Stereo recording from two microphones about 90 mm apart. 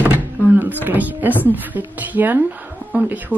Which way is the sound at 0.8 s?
20° right (ahead or behind).